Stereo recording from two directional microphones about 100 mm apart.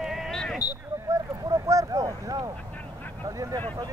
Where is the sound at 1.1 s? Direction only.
30° right (ahead or behind).